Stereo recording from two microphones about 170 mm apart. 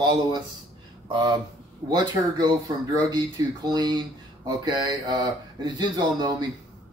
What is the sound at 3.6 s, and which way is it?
Speech, 25° right (ahead or behind).